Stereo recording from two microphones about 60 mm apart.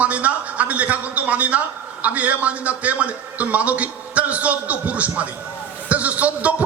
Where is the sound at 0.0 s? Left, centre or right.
Right.